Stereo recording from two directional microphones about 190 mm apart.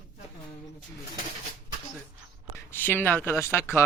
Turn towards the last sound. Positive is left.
turn(degrees=15)  # may be behind; listen again after turning